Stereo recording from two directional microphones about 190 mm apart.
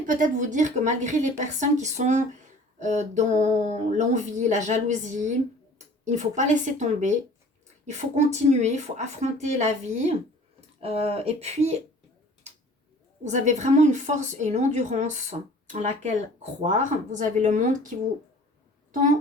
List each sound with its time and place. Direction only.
0.0 s a woman's voice: 45° right (ahead or behind)
13.2 s a woman's voice: 40° right (ahead or behind)
17.2 s a woman's voice: 40° right (ahead or behind)